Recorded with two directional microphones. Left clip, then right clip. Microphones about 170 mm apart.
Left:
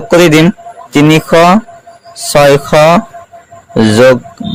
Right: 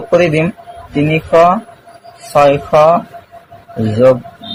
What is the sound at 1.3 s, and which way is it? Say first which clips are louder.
Speech: left 1 dB; 90° left.